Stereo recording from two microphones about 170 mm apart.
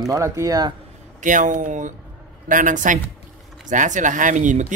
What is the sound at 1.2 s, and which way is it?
Speech, 50° right (ahead or behind).